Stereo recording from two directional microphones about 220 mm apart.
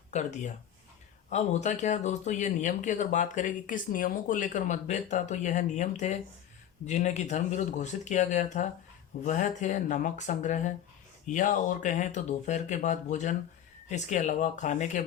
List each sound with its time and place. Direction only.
0.1 s speech: 35° left (ahead or behind)